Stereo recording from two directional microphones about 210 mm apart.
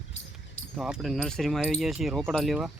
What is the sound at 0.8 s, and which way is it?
Speech, 5° right (ahead or behind).